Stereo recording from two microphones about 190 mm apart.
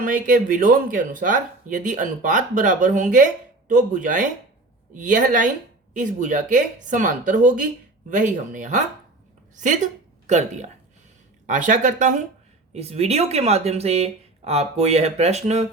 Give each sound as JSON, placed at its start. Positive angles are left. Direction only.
{"t": 0.0, "sound": "a woman's voice", "side_deg": -45}